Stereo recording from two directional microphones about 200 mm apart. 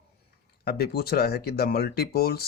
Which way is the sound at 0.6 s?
50° left (ahead or behind).